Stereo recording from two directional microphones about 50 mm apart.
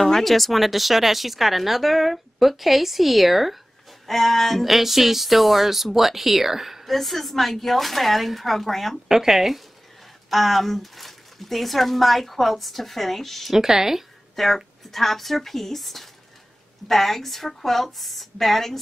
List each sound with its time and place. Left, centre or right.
0.0 s speech: centre
9.1 s speech: centre
14.3 s speech: centre